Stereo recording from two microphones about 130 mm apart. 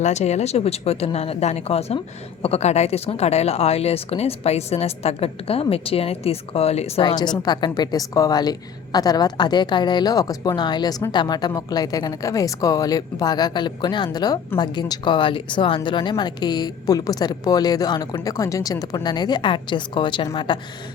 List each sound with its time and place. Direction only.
0.0 s speech: 60° left (ahead or behind)
7.0 s a woman's voice: 35° left (ahead or behind)